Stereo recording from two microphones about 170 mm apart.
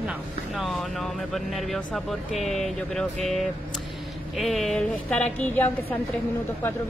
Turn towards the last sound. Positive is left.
turn(degrees=10)  # may be behind; listen again after turning